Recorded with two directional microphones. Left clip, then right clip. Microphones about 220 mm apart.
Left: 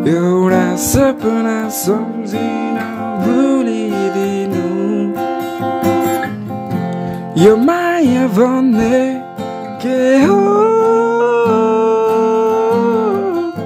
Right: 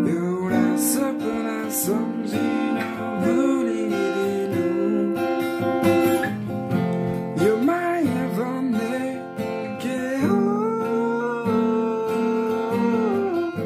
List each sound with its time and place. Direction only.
0.0 s music: 35° left (ahead or behind)
5.8 s music: 40° left (ahead or behind)
7.5 s music: 35° left (ahead or behind)